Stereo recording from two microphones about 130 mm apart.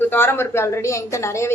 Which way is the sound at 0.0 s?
15° left (ahead or behind).